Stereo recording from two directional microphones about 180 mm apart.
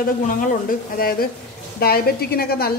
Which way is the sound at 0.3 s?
50° left (ahead or behind).